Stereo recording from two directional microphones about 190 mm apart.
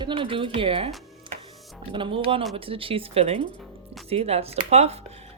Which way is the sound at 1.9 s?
25° right (ahead or behind).